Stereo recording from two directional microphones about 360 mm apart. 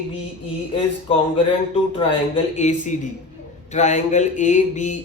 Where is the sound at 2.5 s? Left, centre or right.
Centre.